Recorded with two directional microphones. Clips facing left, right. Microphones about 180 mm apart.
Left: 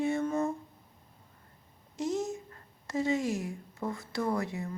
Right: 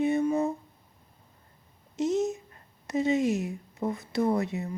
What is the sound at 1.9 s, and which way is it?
Speech, 20° right (ahead or behind).